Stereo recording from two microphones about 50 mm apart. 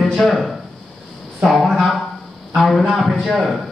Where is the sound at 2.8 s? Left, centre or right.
Centre.